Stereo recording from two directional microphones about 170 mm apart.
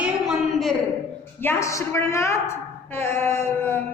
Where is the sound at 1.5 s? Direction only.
15° left (ahead or behind).